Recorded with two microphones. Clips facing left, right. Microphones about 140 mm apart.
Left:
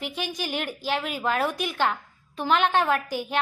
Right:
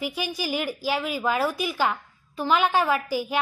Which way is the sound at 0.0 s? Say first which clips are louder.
Right 2 dB; 10° right (ahead or behind).